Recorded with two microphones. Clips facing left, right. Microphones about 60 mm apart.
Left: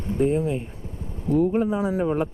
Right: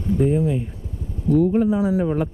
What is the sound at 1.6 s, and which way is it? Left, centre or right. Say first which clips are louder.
Speech: right 4 dB; left.